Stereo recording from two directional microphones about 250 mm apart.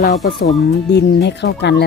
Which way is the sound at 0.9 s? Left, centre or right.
Left.